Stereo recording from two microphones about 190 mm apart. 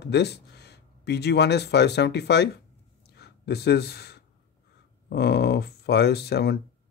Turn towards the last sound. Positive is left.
turn(degrees=60)  # may be behind; listen again after turning